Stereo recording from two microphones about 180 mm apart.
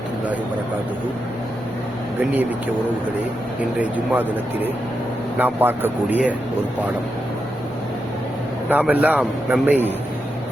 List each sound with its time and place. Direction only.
3.6 s a man's voice: 10° right (ahead or behind)
8.7 s a man's voice: 10° right (ahead or behind)